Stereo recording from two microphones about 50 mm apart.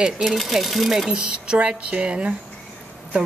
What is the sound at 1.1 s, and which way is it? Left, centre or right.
Speech, right.